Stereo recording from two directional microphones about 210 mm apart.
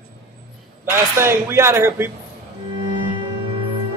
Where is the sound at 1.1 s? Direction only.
10° right (ahead or behind).